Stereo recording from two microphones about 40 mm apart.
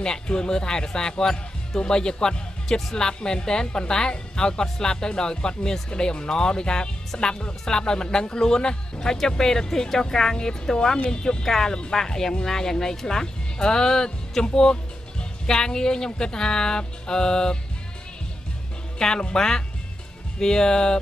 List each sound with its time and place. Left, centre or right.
0.0 s speech: centre
18.9 s speech: centre